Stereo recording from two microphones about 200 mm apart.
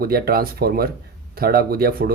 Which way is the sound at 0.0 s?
50° right (ahead or behind).